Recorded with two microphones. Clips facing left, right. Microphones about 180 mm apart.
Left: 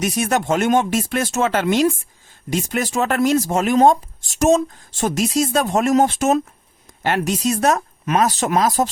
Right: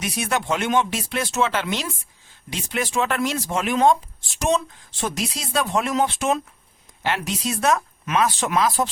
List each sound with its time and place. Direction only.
0.0 s speech: 45° left (ahead or behind)